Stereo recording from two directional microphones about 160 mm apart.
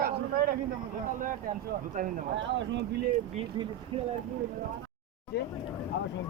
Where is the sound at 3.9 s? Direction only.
35° right (ahead or behind).